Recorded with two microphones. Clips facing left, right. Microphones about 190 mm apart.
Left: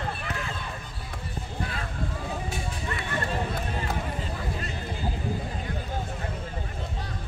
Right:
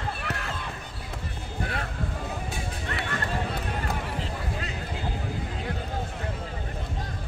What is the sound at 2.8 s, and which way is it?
Music, 70° right (ahead or behind).